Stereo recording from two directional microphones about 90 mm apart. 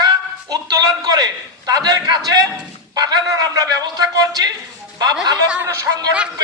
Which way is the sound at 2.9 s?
45° right (ahead or behind).